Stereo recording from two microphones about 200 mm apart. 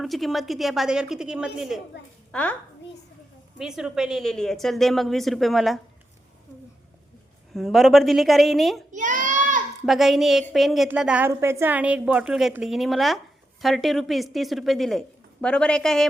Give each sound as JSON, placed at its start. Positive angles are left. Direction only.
{"t": 0.0, "sound": "a woman's voice", "side_deg": 0}
{"t": 3.6, "sound": "a woman's voice", "side_deg": 0}
{"t": 7.5, "sound": "a woman's voice", "side_deg": 0}
{"t": 8.9, "sound": "child singing", "side_deg": -40}
{"t": 9.8, "sound": "a woman's voice", "side_deg": 0}